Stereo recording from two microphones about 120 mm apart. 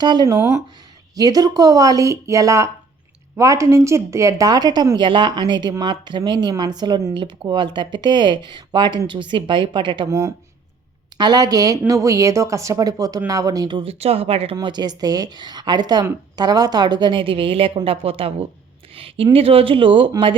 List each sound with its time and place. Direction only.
0.0 s speech: 35° right (ahead or behind)
10.1 s speech: 30° right (ahead or behind)
14.0 s speech: 55° right (ahead or behind)
14.5 s speech: 40° right (ahead or behind)